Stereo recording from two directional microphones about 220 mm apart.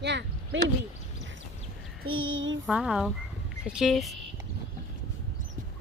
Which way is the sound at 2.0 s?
70° right (ahead or behind).